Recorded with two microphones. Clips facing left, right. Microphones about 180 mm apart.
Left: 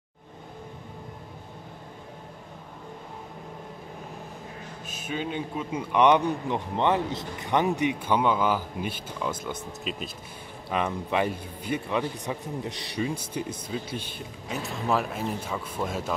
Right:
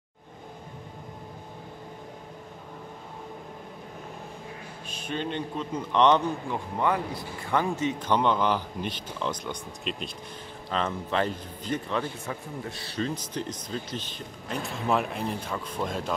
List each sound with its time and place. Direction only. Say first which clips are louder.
5.0 s a man's voice: even; 5° left (ahead or behind)
6.8 s a man's voice: left 2 dB; 25° left (ahead or behind); by 16.1 s 5° left (ahead or behind)